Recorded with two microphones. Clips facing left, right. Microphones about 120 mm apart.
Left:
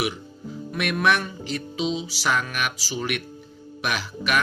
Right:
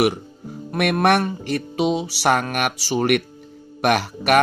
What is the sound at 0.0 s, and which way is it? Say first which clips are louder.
Speech: right 8 dB; 60° right (ahead or behind).